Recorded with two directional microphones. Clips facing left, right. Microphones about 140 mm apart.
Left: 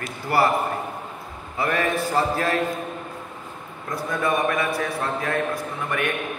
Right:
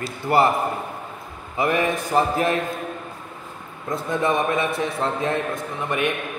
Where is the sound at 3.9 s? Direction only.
25° right (ahead or behind).